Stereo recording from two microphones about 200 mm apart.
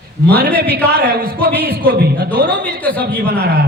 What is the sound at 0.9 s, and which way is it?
A man's voice, 55° right (ahead or behind).